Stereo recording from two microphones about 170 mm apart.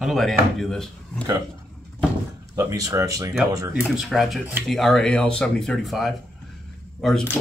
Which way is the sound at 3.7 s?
5° right (ahead or behind).